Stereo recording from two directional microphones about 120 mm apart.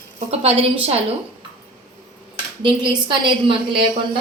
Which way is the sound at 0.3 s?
60° right (ahead or behind).